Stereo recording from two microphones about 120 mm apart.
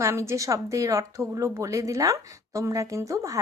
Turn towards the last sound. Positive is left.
turn(degrees=-25)  # may be behind; listen again after turning